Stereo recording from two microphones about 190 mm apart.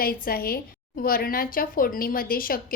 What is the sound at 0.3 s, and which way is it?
A woman's voice, 50° left (ahead or behind).